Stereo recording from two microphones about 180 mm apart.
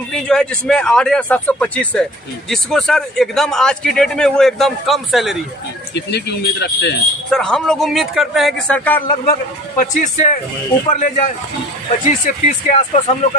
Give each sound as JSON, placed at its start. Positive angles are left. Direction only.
{"t": 0.1, "sound": "a man's voice", "side_deg": 5}
{"t": 5.9, "sound": "speech", "side_deg": 65}
{"t": 7.3, "sound": "a man's voice", "side_deg": 5}
{"t": 9.7, "sound": "speech", "side_deg": 50}